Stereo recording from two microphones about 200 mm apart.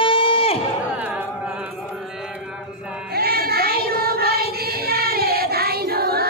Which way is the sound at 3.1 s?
50° right (ahead or behind).